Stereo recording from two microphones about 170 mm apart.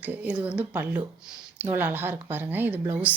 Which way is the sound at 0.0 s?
10° right (ahead or behind).